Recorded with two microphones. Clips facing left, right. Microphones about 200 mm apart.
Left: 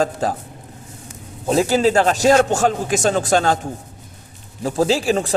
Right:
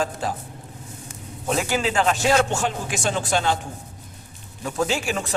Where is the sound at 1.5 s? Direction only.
35° left (ahead or behind).